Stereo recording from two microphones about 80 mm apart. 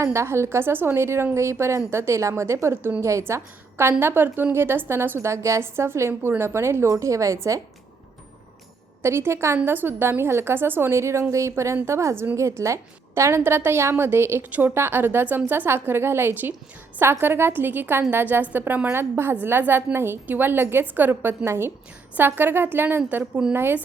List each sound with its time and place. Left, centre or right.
0.0 s a woman's voice: right
9.0 s a woman's voice: right